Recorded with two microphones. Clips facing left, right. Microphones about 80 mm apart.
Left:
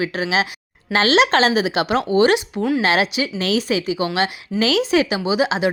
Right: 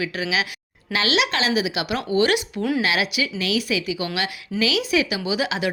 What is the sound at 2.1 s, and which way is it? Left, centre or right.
A woman's voice, left.